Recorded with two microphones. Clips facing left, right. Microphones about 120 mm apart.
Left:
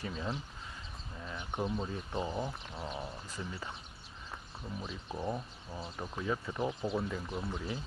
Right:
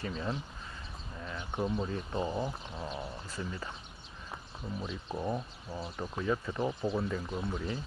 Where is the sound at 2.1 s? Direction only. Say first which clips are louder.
Right 2 dB; 10° right (ahead or behind).